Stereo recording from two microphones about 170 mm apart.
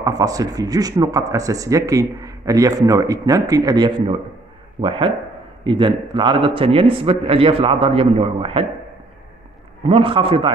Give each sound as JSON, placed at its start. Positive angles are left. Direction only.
{"t": 0.0, "sound": "a man's voice", "side_deg": -20}
{"t": 9.8, "sound": "a man's voice", "side_deg": -30}